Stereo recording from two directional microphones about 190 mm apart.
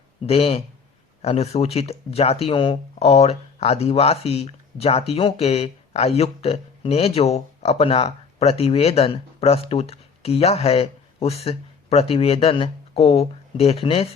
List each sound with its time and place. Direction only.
0.2 s speech: 30° left (ahead or behind)